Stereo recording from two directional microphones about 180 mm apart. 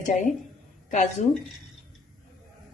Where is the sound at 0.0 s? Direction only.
40° left (ahead or behind).